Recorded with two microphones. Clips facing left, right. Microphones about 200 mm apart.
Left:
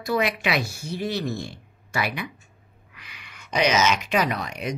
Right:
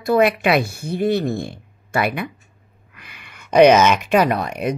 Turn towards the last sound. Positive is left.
turn(degrees=-55)  # may be behind; listen again after turning